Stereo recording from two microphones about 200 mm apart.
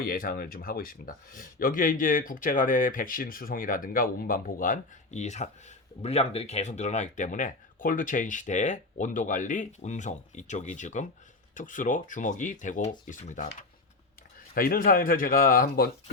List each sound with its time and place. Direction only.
0.0 s speech: 45° left (ahead or behind)
14.5 s speech: 45° left (ahead or behind)